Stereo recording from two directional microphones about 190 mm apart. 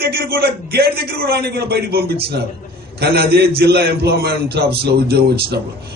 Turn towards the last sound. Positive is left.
turn(degrees=-55)  # may be behind; listen again after turning